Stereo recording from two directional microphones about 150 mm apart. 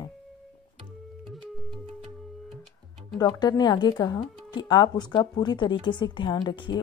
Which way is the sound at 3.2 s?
25° left (ahead or behind).